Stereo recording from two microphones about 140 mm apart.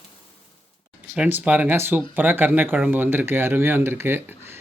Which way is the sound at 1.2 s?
10° right (ahead or behind).